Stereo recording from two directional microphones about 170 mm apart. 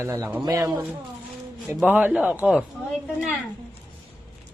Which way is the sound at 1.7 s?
10° right (ahead or behind).